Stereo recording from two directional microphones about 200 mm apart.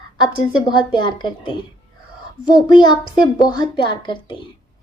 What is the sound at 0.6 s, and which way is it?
Speech, 20° left (ahead or behind).